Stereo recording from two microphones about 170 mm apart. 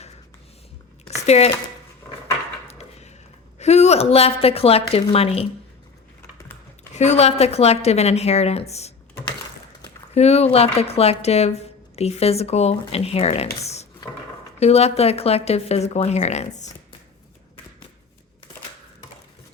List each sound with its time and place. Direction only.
1.2 s speech: 40° left (ahead or behind)
2.6 s a sound: 40° left (ahead or behind)
3.6 s speech: 40° left (ahead or behind)
6.9 s speech: 40° left (ahead or behind)
10.2 s speech: 40° left (ahead or behind)